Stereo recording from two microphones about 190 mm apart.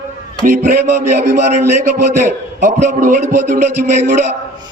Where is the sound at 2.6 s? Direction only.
40° right (ahead or behind).